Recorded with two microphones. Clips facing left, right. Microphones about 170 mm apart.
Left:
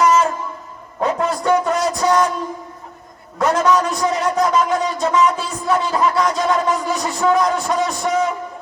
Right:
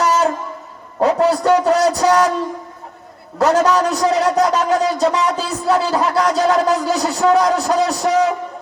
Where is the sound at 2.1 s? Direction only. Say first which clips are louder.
Even; 75° right (ahead or behind).